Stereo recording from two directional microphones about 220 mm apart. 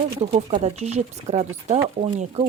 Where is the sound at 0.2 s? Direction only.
30° right (ahead or behind).